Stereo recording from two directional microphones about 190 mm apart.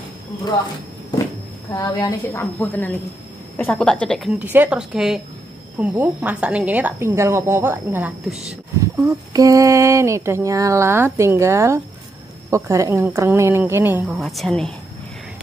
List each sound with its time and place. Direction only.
1.7 s a woman's voice: 15° left (ahead or behind); by 9.1 s 5° right (ahead or behind)
9.3 s a woman's voice: 20° right (ahead or behind)
14.0 s a woman's voice: centre (ahead or behind)